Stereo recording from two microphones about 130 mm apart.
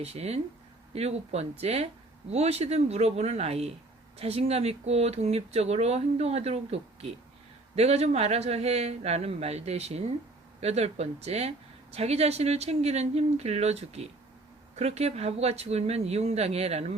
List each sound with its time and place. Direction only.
0.0 s speech: 55° right (ahead or behind)